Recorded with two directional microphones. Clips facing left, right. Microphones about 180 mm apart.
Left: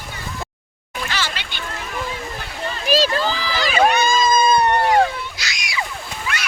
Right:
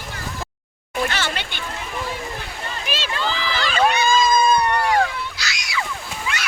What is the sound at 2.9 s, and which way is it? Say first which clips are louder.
Speech: left 8 dB; 40° left (ahead or behind).